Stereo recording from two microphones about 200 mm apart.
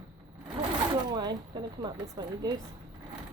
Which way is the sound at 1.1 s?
20° right (ahead or behind).